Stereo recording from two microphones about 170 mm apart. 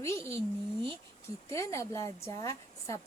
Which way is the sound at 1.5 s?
15° left (ahead or behind).